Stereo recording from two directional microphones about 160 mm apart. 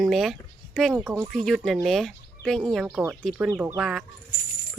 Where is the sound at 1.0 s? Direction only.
20° right (ahead or behind).